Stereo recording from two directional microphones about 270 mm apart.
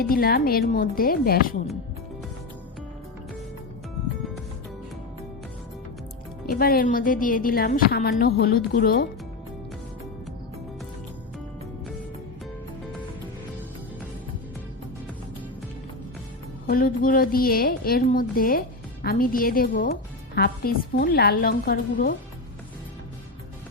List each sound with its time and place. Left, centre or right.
0.0 s a woman's voice: left
6.4 s a woman's voice: left
16.6 s a woman's voice: left